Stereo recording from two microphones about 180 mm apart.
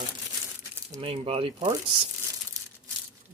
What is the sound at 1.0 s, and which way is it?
Speech, 30° right (ahead or behind).